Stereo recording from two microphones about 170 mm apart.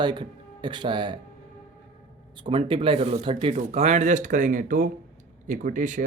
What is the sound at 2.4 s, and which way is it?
Speech, 30° right (ahead or behind).